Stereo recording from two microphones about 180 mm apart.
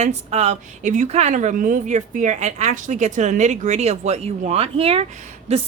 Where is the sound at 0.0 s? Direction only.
35° right (ahead or behind).